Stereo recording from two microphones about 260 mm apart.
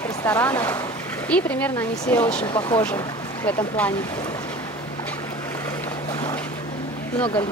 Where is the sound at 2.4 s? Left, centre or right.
Centre.